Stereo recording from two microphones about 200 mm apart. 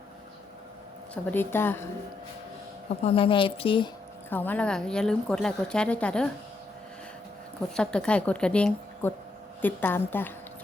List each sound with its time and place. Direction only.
1.1 s a woman's voice: 10° left (ahead or behind)
3.0 s a woman's voice: 30° left (ahead or behind)
4.3 s speech: 10° left (ahead or behind)
7.8 s a woman's voice: 5° left (ahead or behind)